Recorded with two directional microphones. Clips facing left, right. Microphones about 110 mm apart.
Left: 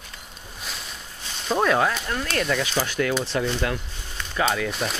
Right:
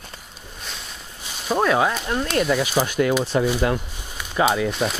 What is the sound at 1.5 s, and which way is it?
Speech, 5° right (ahead or behind).